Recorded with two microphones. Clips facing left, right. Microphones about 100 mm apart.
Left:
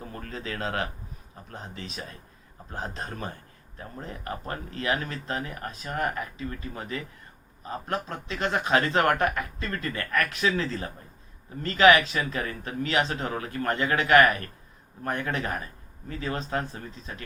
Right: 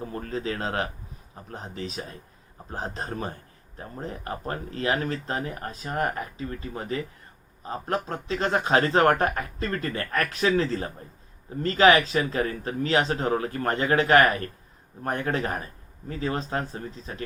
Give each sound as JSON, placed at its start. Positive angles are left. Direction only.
{"t": 0.0, "sound": "speech", "side_deg": -30}